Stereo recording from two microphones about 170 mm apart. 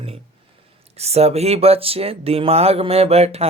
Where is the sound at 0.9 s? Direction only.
40° right (ahead or behind).